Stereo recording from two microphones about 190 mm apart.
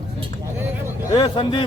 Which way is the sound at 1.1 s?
25° left (ahead or behind).